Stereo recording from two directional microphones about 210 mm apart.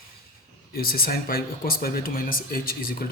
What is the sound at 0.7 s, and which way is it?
Speech, 45° left (ahead or behind).